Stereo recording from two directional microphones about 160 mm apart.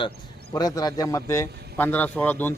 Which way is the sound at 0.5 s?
25° left (ahead or behind).